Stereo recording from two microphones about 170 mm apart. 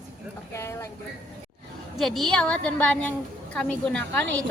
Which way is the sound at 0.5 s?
15° left (ahead or behind).